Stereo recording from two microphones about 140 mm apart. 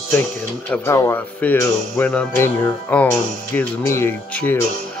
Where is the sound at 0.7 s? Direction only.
20° left (ahead or behind).